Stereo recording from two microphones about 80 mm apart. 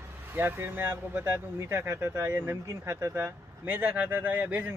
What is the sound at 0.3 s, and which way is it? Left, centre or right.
Speech, right.